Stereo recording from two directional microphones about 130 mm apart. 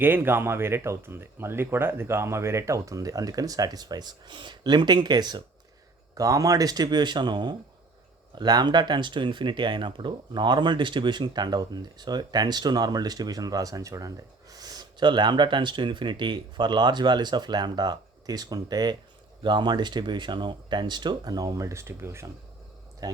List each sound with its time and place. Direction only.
0.0 s speech: 15° right (ahead or behind)